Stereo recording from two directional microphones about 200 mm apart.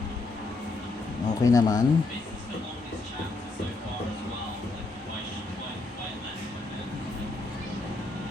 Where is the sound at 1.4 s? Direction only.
20° left (ahead or behind).